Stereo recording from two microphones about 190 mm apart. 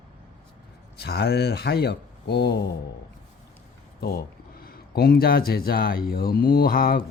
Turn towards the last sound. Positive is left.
turn(degrees=50)  # may be behind; listen again after turning